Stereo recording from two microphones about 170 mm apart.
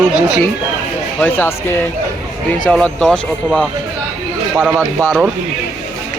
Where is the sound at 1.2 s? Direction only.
10° left (ahead or behind).